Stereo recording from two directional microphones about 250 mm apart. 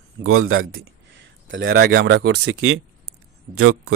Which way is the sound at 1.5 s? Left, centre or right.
Right.